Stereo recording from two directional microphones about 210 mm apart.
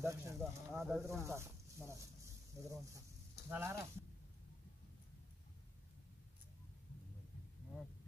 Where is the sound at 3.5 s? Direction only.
10° right (ahead or behind).